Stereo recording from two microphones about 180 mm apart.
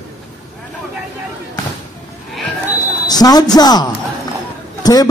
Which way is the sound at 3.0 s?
20° left (ahead or behind).